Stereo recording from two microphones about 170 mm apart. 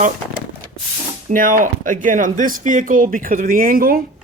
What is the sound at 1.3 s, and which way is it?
Speech, 55° right (ahead or behind).